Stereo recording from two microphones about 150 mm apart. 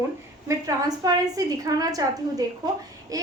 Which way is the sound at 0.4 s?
25° right (ahead or behind).